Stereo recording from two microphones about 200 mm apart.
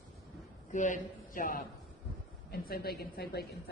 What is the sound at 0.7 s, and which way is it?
A man's voice, 40° left (ahead or behind).